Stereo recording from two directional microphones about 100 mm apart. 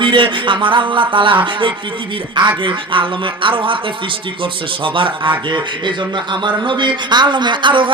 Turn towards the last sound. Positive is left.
turn(degrees=-55)  # may be behind; listen again after turning